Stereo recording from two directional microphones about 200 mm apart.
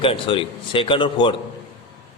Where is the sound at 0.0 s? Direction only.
25° left (ahead or behind).